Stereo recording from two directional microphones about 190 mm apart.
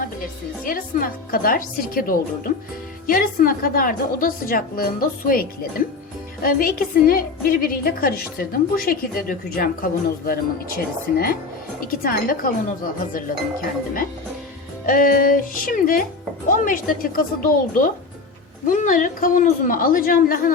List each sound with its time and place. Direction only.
0.6 s a woman's voice: 45° left (ahead or behind)